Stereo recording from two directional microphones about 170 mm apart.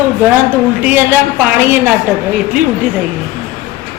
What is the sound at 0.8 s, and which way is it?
A woman's voice, 10° right (ahead or behind).